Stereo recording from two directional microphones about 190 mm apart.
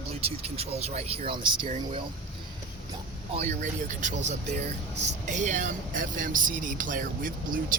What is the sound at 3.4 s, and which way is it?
Speech, 40° right (ahead or behind).